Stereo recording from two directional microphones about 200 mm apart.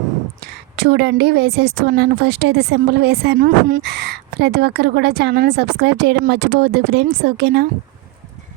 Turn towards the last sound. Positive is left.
turn(degrees=-55)  # may be behind; listen again after turning